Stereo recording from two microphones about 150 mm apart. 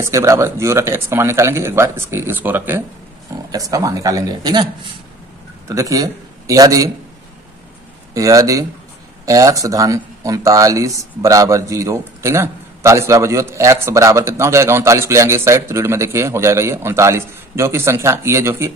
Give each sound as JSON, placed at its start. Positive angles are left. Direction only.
{"t": 0.0, "sound": "speech", "side_deg": -20}
{"t": 5.7, "sound": "a man's voice", "side_deg": -20}
{"t": 8.1, "sound": "speech", "side_deg": -25}